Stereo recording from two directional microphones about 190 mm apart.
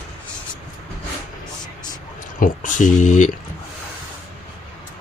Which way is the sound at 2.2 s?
45° left (ahead or behind).